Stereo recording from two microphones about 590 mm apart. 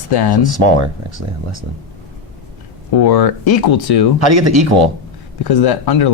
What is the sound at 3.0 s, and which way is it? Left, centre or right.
Speech, left.